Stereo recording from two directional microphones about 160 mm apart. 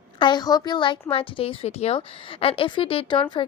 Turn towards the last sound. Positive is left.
turn(degrees=35)  # may be behind; listen again after turning